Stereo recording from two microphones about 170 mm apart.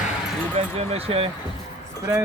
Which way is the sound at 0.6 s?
35° right (ahead or behind).